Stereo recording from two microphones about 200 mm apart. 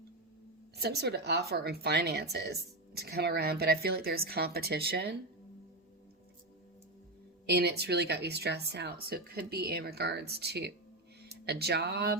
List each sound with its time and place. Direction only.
0.8 s a woman's voice: 55° right (ahead or behind)
7.4 s speech: 55° right (ahead or behind)